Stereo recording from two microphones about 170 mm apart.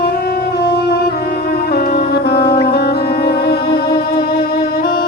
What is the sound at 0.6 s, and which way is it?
Music, 70° left (ahead or behind).